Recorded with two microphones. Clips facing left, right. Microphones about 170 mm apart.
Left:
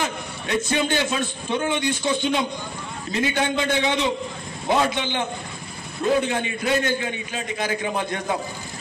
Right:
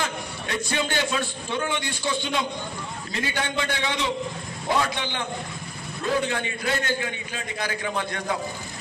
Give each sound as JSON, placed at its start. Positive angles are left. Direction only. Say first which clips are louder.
{"t": 0.0, "sound": "a man's voice", "louder": "left 2 dB", "side_deg": 20}